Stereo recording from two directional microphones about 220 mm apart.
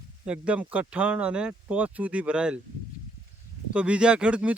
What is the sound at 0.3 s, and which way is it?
Speech, 5° right (ahead or behind).